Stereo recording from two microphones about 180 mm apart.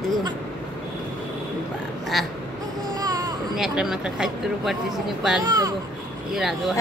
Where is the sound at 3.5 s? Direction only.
Centre (ahead or behind).